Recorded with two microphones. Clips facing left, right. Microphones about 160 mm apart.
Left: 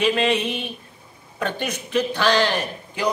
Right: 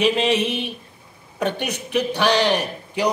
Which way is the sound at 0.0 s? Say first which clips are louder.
Right 1 dB; 20° right (ahead or behind).